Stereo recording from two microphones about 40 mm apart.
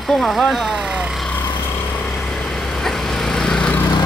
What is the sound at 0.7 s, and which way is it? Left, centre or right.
Speech, centre.